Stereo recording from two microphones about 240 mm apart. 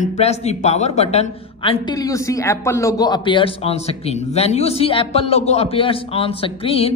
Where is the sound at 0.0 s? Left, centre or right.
Left.